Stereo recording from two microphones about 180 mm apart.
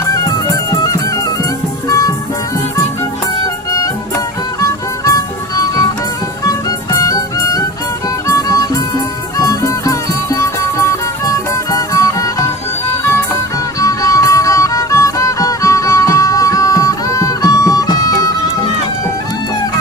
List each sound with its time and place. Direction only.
0.0 s music: 20° left (ahead or behind)
4.6 s music: 20° left (ahead or behind)
13.7 s music: 20° left (ahead or behind)